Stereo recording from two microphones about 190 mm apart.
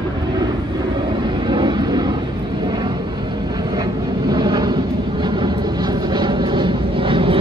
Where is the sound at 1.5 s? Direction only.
25° right (ahead or behind).